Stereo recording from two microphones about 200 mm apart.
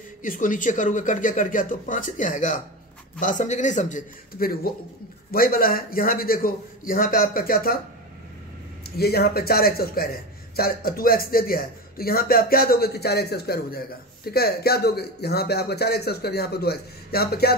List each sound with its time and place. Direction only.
0.2 s a man's voice: 40° left (ahead or behind)
8.8 s a man's voice: 50° left (ahead or behind)